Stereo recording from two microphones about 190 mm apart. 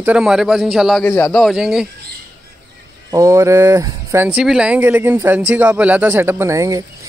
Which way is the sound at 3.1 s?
15° right (ahead or behind).